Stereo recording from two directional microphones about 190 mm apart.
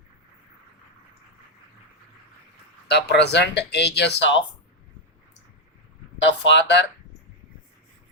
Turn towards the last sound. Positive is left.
turn(degrees=65)  # may be behind; listen again after turning